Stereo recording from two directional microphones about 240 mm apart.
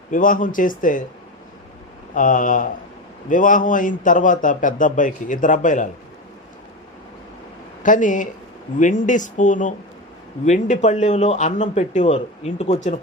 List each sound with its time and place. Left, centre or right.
0.1 s a man's voice: left
2.1 s a man's voice: left
7.8 s a man's voice: left